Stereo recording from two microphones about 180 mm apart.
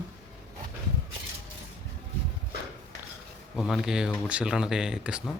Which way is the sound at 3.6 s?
Centre (ahead or behind).